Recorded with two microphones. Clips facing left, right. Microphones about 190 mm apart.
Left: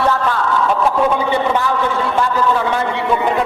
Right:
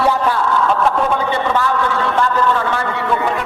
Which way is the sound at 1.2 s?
10° left (ahead or behind).